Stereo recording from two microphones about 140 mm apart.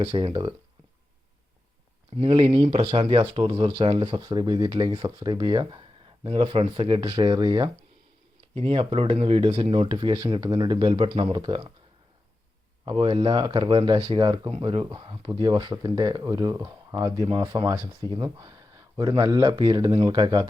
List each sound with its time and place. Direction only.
0.0 s speech: 35° right (ahead or behind)
2.1 s speech: 40° right (ahead or behind)
8.5 s speech: 45° right (ahead or behind)
12.8 s speech: 40° right (ahead or behind)